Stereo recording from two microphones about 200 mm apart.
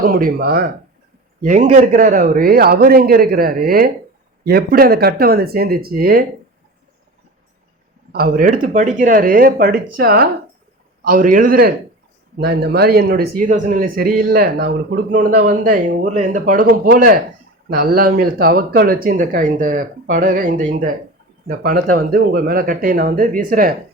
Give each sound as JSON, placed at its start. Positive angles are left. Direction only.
{"t": 0.0, "sound": "speech", "side_deg": -45}
{"t": 8.1, "sound": "speech", "side_deg": -45}